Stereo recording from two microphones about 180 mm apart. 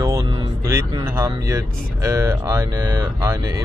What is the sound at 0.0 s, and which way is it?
Music, 20° right (ahead or behind).